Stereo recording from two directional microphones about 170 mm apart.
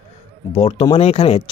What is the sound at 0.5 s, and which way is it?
Speech, 35° left (ahead or behind).